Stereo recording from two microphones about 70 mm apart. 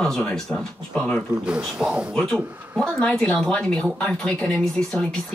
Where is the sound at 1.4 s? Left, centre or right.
Centre.